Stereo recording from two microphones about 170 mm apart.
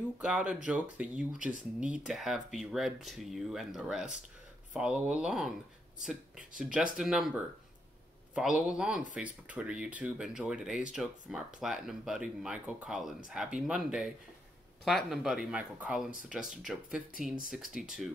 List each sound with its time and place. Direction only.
0.2 s speech: 5° right (ahead or behind)
6.6 s speech: 5° right (ahead or behind)
8.4 s speech: 5° right (ahead or behind)